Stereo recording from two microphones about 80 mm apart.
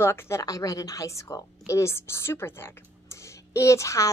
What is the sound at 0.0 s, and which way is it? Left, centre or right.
Speech, left.